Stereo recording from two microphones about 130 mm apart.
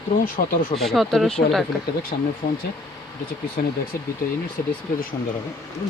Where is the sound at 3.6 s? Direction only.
90° left.